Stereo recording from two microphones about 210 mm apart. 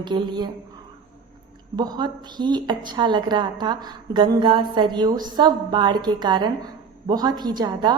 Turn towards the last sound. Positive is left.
turn(degrees=-20)  # may be behind; listen again after turning